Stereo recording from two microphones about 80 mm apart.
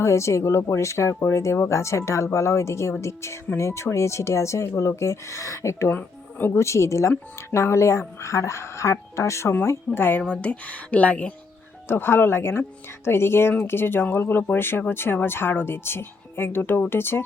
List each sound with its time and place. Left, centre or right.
0.0 s speech: left
5.9 s a sound: left
6.5 s speech: left
10.2 s speech: centre
11.9 s speech: left